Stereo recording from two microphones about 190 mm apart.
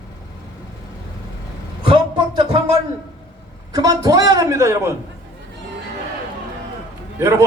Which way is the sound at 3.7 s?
20° right (ahead or behind).